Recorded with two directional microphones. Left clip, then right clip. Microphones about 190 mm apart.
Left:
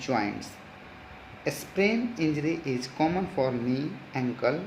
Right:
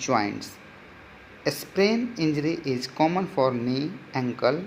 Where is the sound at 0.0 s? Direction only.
25° right (ahead or behind).